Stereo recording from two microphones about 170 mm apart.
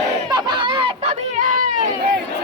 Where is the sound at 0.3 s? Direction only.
25° right (ahead or behind).